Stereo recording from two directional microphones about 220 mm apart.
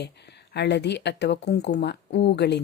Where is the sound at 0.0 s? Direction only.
50° left (ahead or behind).